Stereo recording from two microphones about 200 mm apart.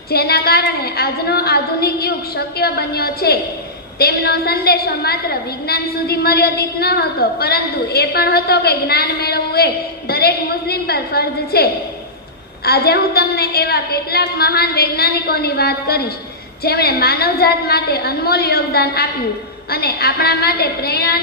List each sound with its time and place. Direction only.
0.1 s a woman's voice: 50° left (ahead or behind)